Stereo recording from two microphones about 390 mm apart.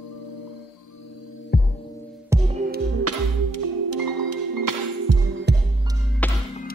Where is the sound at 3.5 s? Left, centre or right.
Right.